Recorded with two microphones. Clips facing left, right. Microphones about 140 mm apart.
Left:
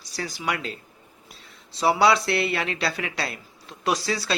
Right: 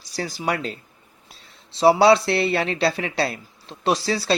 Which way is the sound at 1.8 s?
30° right (ahead or behind).